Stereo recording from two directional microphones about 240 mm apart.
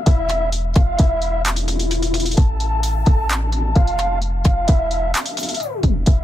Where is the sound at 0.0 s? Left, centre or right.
Centre.